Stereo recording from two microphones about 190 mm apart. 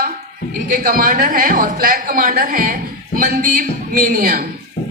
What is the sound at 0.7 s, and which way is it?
A woman's voice, 45° right (ahead or behind).